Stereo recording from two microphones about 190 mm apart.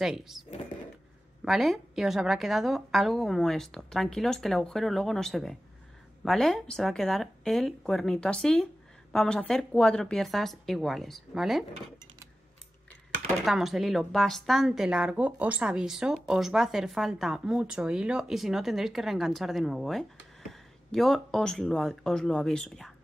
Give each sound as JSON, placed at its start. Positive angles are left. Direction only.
{"t": 0.0, "sound": "a woman's voice", "side_deg": 0}
{"t": 1.4, "sound": "a woman's voice", "side_deg": 0}
{"t": 13.5, "sound": "a woman's voice", "side_deg": 0}